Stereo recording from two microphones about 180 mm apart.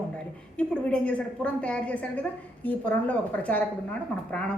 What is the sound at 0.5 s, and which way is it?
A woman's voice, 5° left (ahead or behind).